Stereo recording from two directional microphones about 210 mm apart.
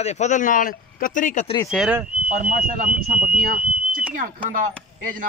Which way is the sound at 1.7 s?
Centre (ahead or behind).